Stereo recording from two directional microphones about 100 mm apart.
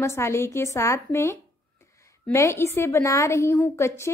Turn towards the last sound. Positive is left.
turn(degrees=30)  # may be behind; listen again after turning